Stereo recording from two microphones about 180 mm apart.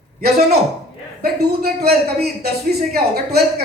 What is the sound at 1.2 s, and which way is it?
Speech, 60° right (ahead or behind).